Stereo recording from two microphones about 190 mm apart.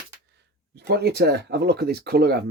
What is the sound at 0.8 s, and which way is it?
Speech, 60° right (ahead or behind).